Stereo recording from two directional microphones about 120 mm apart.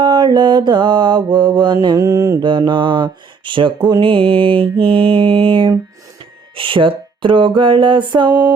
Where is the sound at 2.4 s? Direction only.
40° right (ahead or behind).